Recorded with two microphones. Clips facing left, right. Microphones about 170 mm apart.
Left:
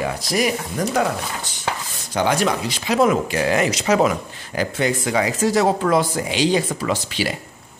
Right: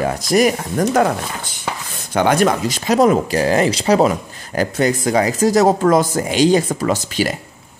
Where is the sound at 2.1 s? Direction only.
55° right (ahead or behind).